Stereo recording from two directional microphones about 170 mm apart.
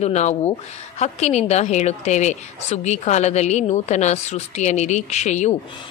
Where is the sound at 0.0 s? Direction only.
40° left (ahead or behind).